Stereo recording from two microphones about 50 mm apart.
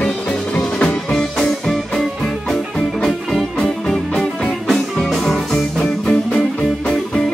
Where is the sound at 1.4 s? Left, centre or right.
Centre.